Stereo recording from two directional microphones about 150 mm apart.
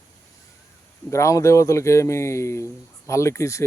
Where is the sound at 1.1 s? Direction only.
20° left (ahead or behind).